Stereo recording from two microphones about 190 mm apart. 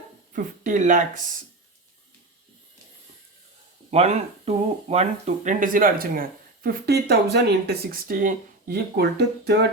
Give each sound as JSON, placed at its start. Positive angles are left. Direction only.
{"t": 0.3, "sound": "speech", "side_deg": -45}
{"t": 3.9, "sound": "speech", "side_deg": -35}